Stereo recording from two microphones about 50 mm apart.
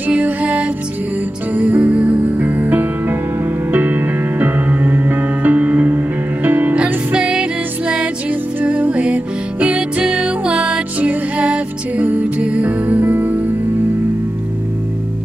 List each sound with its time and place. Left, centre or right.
0.0 s music: right
7.1 s music: centre
7.9 s music: right